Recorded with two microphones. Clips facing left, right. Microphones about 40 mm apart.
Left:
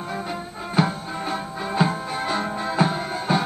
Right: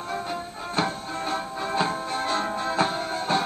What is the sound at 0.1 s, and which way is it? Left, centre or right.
Music, centre.